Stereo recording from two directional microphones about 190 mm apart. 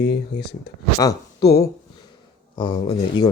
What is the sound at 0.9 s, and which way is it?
Speech, 20° left (ahead or behind).